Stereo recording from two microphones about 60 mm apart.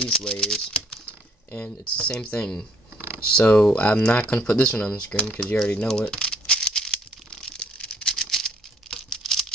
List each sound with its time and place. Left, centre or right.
0.0 s speech: centre
2.0 s speech: centre
4.6 s speech: centre
5.5 s speech: left
5.9 s rattle: centre